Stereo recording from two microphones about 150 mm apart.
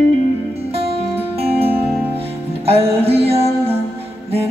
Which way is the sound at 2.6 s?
40° right (ahead or behind).